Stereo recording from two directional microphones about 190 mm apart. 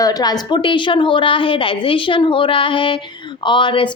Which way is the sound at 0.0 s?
20° left (ahead or behind).